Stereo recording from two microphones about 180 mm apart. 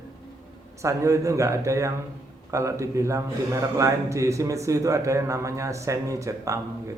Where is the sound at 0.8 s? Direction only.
15° right (ahead or behind).